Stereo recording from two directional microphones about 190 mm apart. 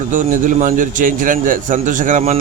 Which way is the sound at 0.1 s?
45° right (ahead or behind).